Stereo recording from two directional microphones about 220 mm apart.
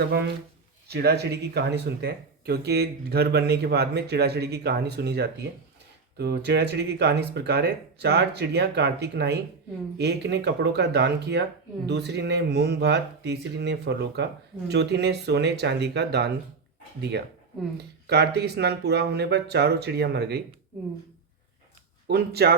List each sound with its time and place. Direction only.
0.0 s speech: 45° right (ahead or behind)
22.0 s speech: 45° right (ahead or behind)